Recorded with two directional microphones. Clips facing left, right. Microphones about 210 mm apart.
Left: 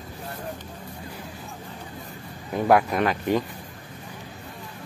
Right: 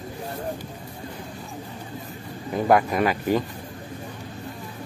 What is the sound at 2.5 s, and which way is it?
Speech, centre (ahead or behind).